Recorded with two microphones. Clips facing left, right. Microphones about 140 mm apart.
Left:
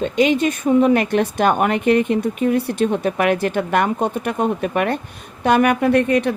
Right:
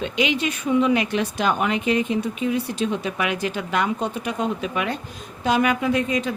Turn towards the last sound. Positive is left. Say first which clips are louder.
# left 6 dB
turn(degrees=60)  # may be behind; listen again after turning